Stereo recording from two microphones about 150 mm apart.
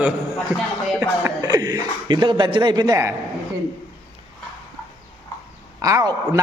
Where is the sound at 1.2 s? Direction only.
25° right (ahead or behind).